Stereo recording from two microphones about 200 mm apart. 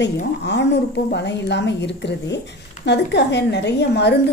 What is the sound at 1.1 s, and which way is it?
A woman's voice, 60° left (ahead or behind).